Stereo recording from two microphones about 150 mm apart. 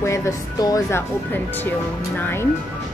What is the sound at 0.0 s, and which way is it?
Speech, 20° left (ahead or behind).